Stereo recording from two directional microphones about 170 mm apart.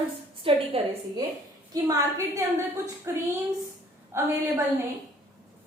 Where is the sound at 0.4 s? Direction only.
30° right (ahead or behind).